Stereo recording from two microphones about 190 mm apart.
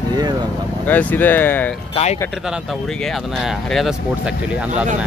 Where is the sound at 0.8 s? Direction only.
10° left (ahead or behind).